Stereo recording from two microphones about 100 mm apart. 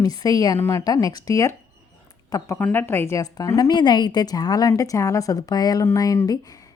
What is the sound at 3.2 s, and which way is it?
Speech, 40° left (ahead or behind).